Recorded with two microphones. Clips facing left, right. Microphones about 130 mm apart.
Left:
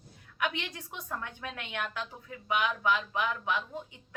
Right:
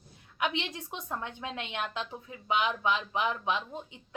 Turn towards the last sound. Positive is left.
turn(degrees=-20)  # may be behind; listen again after turning